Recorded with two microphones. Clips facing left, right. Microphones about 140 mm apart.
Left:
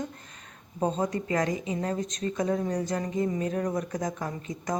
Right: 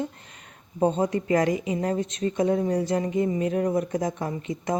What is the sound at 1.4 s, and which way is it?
Speech, 35° left (ahead or behind).